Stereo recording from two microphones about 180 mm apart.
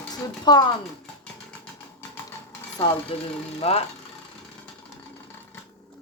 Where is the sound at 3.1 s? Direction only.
30° left (ahead or behind).